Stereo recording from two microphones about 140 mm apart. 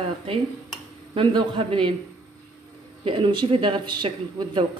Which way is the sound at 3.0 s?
40° right (ahead or behind).